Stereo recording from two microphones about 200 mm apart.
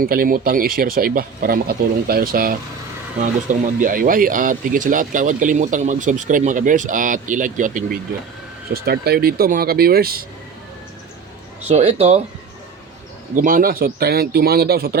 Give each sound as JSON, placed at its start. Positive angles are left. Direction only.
{"t": 0.0, "sound": "speech", "side_deg": -45}
{"t": 11.7, "sound": "speech", "side_deg": -35}
{"t": 13.3, "sound": "speech", "side_deg": -45}